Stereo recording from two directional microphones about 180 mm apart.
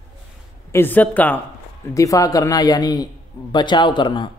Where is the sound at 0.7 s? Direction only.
10° left (ahead or behind).